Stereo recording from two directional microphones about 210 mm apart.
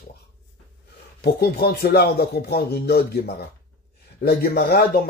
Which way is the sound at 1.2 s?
50° left (ahead or behind).